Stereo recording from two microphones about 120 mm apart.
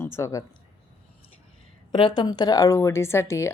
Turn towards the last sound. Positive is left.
turn(degrees=25)  # may be behind; listen again after turning